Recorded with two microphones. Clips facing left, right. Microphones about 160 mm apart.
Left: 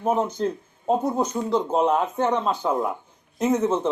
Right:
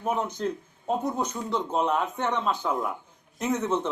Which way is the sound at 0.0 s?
30° left (ahead or behind).